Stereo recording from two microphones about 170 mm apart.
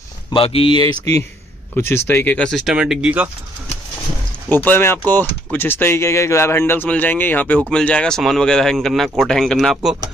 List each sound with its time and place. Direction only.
0.3 s speech: 30° left (ahead or behind)
1.8 s speech: 15° left (ahead or behind); by 3.3 s 5° right (ahead or behind)
4.5 s speech: 10° left (ahead or behind)